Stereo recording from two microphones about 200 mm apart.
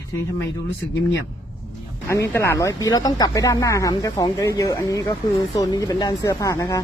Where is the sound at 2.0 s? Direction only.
15° left (ahead or behind).